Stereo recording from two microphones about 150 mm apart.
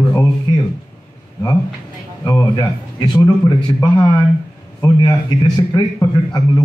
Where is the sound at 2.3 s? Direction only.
25° left (ahead or behind).